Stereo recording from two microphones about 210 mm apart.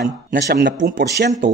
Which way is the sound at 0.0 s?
55° right (ahead or behind).